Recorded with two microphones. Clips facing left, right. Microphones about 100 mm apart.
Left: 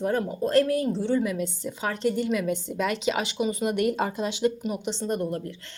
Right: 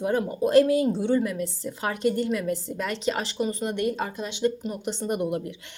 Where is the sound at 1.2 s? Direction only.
5° left (ahead or behind).